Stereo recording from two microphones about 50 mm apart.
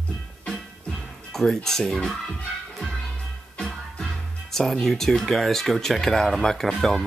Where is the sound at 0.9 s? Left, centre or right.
Centre.